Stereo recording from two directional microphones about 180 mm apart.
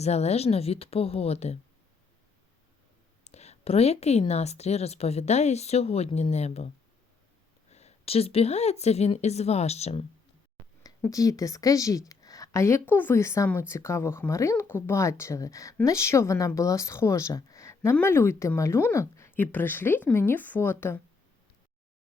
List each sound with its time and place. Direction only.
0.0 s a woman's voice: 35° left (ahead or behind)
3.2 s a woman's voice: 35° left (ahead or behind)
7.7 s a woman's voice: 35° left (ahead or behind)
11.0 s a woman's voice: 20° left (ahead or behind)